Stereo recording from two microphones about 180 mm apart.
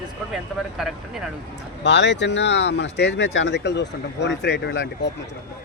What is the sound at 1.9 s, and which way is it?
Speech, 75° left (ahead or behind).